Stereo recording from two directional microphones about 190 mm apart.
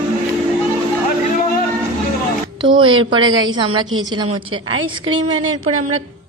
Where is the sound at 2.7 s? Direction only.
25° right (ahead or behind).